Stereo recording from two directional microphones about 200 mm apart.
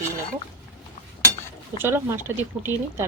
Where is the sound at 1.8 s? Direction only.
10° right (ahead or behind).